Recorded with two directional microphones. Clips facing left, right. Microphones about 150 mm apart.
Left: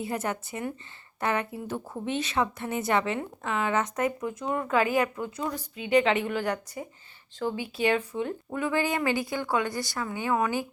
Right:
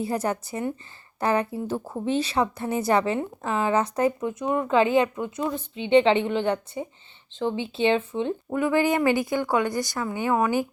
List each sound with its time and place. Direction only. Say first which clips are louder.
0.0 s a woman's voice: right 5 dB; 35° right (ahead or behind); by 10.0 s 20° right (ahead or behind)
10.2 s speech: right 3 dB; 35° right (ahead or behind)